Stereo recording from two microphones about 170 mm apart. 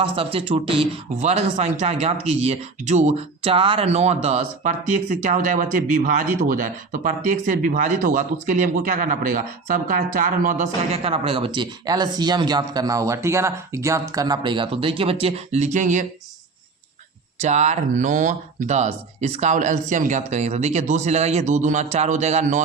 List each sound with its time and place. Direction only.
0.0 s speech: 35° right (ahead or behind); by 10.7 s 50° right (ahead or behind)
10.9 s speech: 35° right (ahead or behind)
17.4 s speech: 40° right (ahead or behind)